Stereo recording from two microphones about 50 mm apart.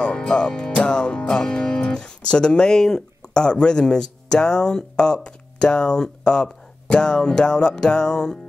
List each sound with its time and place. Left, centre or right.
0.0 s music: centre
0.8 s speech: centre